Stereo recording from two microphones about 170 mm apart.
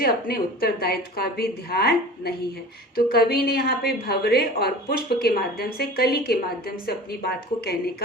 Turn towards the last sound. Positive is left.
turn(degrees=65)  # may be behind; listen again after turning